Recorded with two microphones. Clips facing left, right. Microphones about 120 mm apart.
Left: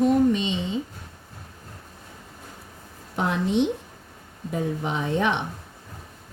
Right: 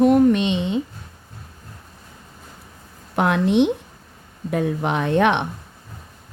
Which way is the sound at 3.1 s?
65° right (ahead or behind).